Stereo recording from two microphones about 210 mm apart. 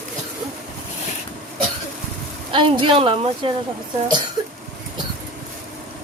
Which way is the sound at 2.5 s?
25° right (ahead or behind).